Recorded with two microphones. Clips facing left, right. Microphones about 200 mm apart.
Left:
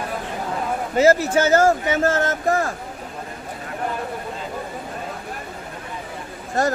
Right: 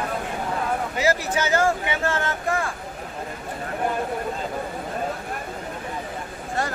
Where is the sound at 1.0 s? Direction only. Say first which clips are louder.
Left 9 dB; 45° left (ahead or behind).